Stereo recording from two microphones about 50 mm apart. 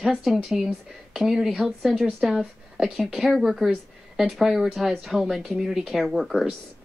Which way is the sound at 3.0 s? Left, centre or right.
Centre.